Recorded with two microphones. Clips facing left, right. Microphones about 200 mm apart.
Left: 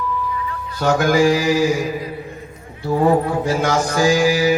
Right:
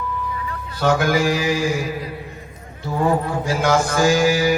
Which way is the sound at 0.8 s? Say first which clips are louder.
Left 3 dB; 50° left (ahead or behind).